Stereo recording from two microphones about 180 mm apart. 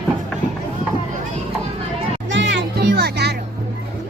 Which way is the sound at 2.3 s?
90° right.